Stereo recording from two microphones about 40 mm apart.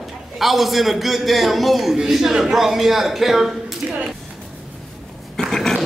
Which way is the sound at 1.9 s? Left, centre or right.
Centre.